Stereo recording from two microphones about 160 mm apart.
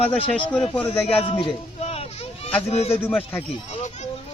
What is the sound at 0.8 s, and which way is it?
A man's voice, 35° left (ahead or behind).